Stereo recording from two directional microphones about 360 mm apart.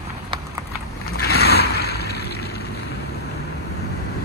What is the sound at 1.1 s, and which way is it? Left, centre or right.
Vehicle, left.